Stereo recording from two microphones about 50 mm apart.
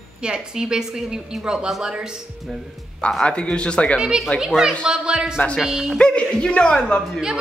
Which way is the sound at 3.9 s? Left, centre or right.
Centre.